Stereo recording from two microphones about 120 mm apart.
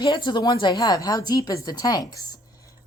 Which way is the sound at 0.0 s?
40° left (ahead or behind).